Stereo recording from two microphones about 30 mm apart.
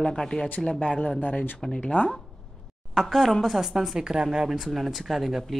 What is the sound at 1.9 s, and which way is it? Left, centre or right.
Speech, left.